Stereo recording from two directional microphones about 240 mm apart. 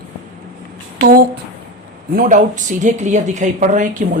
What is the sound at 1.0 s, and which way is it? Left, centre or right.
Speech, right.